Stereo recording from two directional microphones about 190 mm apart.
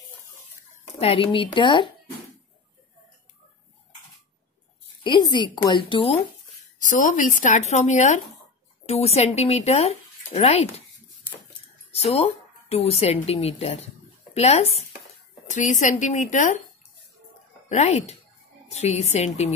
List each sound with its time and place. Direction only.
0.9 s a woman's voice: 30° left (ahead or behind)
5.0 s a woman's voice: 25° left (ahead or behind)
6.8 s speech: 40° left (ahead or behind)
11.9 s a woman's voice: 30° left (ahead or behind)
17.6 s speech: 35° left (ahead or behind)